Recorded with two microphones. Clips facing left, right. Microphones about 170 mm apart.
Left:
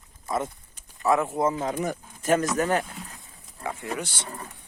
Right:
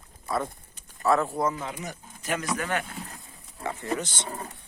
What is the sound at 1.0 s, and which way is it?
Speech, 15° left (ahead or behind).